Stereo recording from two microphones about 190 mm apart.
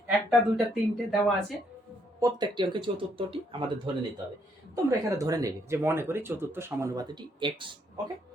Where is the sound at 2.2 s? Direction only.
25° right (ahead or behind).